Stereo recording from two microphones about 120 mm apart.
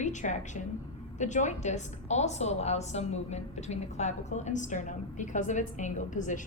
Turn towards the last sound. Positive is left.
turn(degrees=90)